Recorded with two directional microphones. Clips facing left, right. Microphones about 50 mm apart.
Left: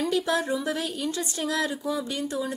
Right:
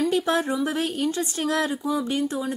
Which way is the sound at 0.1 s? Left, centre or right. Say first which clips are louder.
Right 2 dB; right.